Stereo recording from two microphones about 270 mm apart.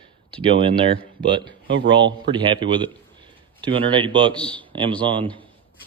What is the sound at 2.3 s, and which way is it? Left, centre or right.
Speech, centre.